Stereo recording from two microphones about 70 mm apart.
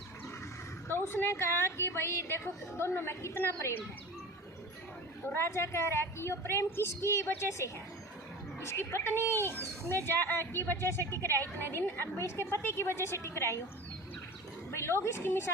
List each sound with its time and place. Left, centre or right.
0.9 s a woman's voice: left
5.3 s a woman's voice: left
14.7 s a woman's voice: left